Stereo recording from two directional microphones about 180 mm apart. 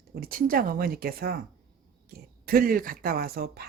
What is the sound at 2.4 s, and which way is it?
Speech, 50° right (ahead or behind).